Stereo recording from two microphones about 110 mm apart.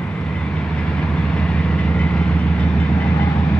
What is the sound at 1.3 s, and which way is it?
Vehicle, 10° left (ahead or behind).